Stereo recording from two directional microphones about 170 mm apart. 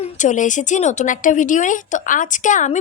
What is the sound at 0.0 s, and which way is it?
A woman's voice, 45° left (ahead or behind).